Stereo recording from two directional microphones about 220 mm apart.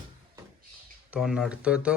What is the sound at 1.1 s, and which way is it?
Speech, 5° right (ahead or behind).